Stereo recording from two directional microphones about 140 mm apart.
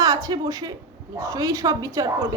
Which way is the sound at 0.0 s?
25° right (ahead or behind).